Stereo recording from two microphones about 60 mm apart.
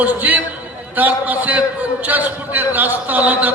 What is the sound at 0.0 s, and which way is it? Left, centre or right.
A man's voice, right.